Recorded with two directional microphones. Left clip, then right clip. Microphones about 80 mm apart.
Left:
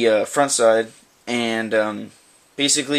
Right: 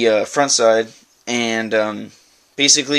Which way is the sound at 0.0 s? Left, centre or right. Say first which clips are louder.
Right 2 dB; right.